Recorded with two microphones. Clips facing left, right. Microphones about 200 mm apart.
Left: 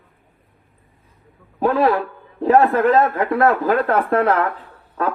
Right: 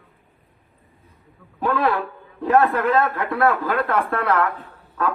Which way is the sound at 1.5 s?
40° left (ahead or behind).